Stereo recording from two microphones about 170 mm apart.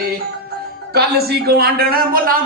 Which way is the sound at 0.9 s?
70° right (ahead or behind).